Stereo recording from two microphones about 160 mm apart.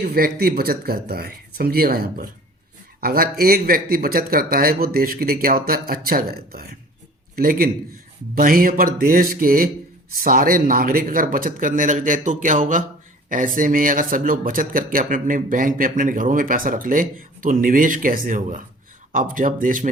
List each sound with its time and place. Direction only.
0.0 s speech: 70° right (ahead or behind)